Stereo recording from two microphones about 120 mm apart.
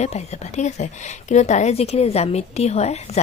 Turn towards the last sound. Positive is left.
turn(degrees=65)  # may be behind; listen again after turning